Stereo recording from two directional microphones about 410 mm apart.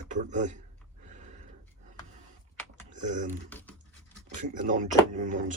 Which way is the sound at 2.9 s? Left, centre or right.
Centre.